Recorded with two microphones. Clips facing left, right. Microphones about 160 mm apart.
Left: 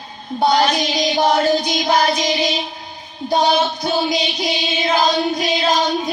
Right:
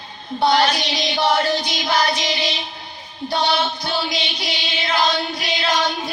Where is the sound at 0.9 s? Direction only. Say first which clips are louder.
Left 3 dB; 45° left (ahead or behind).